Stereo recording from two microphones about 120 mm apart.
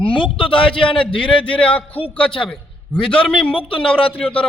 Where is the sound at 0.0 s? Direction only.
45° left (ahead or behind).